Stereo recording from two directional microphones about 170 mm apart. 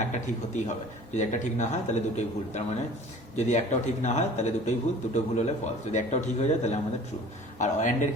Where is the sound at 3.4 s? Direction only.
45° left (ahead or behind).